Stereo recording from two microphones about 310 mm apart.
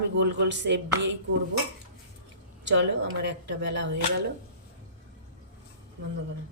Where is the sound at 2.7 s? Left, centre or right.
Right.